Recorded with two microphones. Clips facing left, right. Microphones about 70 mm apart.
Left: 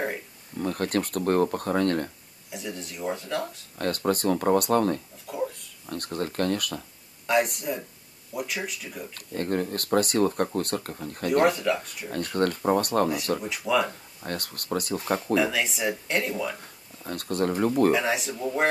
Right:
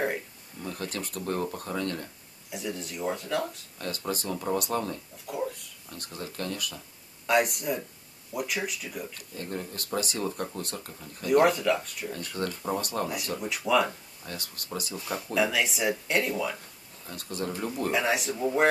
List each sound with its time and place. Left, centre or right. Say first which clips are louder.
0.6 s speech: left 9 dB; left
2.5 s speech: right 1 dB; centre
3.7 s speech: left 10 dB; left
5.2 s a sound: right 1 dB; centre
5.9 s speech: left 9 dB; left
7.2 s speech: left 1 dB; centre
9.1 s speech: left 8 dB; left
11.4 s speech: left 1 dB; centre
12.1 s speech: left 8 dB; left
13.7 s speech: even; centre
14.2 s speech: left 7 dB; left
15.3 s speech: right 1 dB; centre
17.0 s speech: left 7 dB; left
17.9 s speech: left 1 dB; centre